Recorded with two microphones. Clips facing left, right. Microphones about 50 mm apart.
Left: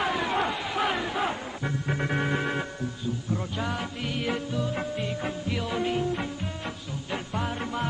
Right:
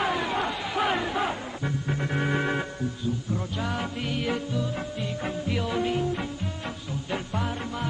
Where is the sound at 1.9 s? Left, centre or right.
Centre.